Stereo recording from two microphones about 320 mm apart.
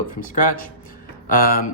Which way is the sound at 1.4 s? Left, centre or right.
Left.